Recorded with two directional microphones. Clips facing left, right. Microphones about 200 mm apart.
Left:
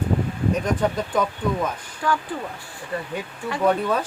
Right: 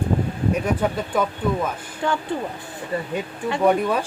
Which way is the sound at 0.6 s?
5° right (ahead or behind).